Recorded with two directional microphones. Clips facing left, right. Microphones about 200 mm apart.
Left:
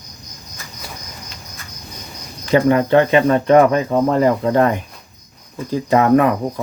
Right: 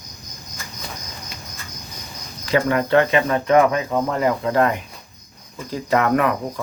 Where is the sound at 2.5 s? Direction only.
20° left (ahead or behind).